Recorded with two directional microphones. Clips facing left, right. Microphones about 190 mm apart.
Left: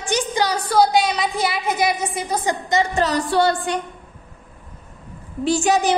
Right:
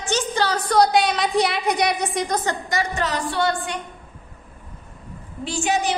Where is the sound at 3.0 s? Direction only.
35° left (ahead or behind).